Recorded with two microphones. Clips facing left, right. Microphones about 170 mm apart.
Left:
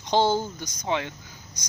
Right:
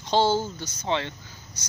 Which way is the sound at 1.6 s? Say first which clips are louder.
Even; 15° left (ahead or behind).